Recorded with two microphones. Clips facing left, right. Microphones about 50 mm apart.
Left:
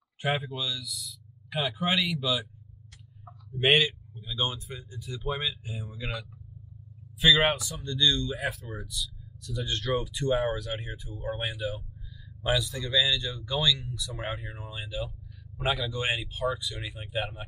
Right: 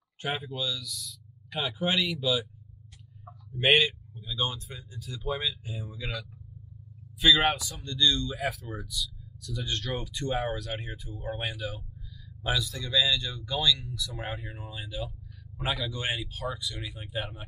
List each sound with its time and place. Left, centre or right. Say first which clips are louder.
0.2 s speech: left 3 dB; centre
3.6 s a man's voice: even; centre
4.1 s speech: left 1 dB; centre
7.2 s a man's voice: left 1 dB; centre
7.8 s speech: even; centre